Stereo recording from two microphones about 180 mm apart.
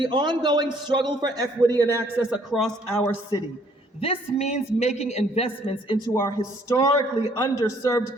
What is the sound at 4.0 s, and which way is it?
A man's voice, 35° left (ahead or behind).